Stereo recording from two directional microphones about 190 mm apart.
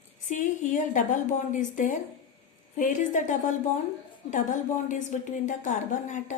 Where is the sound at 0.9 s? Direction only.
40° left (ahead or behind).